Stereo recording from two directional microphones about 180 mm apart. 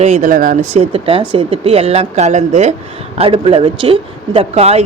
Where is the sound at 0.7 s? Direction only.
35° right (ahead or behind).